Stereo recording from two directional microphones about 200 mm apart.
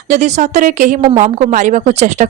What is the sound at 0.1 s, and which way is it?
A woman's voice, 35° right (ahead or behind).